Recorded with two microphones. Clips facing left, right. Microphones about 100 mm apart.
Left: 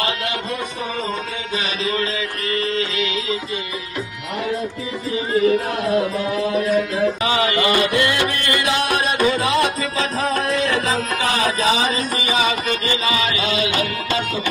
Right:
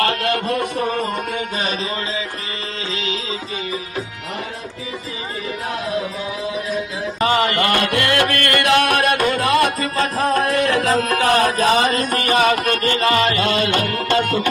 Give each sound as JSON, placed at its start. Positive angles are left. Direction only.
{"t": 0.0, "sound": "a man's voice", "side_deg": -60}
{"t": 7.2, "sound": "music", "side_deg": -45}